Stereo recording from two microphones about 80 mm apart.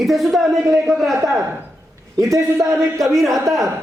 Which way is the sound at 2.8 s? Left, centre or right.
Centre.